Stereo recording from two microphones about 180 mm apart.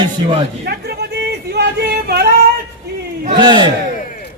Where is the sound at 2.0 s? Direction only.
60° right (ahead or behind).